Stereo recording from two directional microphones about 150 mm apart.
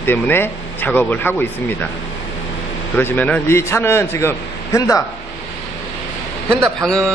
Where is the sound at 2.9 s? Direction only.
10° left (ahead or behind).